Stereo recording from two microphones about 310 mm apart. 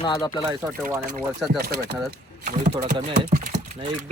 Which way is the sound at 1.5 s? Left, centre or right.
Right.